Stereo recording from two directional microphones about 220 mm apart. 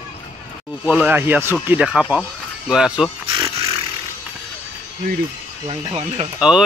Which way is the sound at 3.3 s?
25° right (ahead or behind).